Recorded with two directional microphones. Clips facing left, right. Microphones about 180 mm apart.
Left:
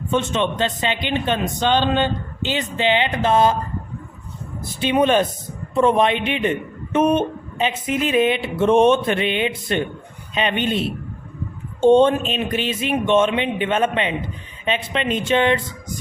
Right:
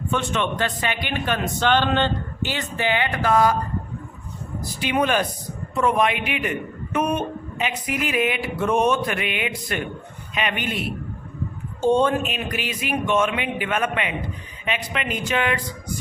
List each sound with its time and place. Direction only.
0.1 s a man's voice: 20° left (ahead or behind)
4.8 s a man's voice: 25° left (ahead or behind)